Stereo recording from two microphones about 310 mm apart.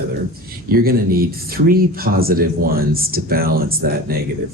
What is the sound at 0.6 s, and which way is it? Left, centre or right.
Speech, right.